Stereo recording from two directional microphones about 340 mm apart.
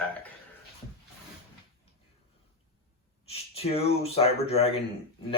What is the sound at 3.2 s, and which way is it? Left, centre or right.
Speech, centre.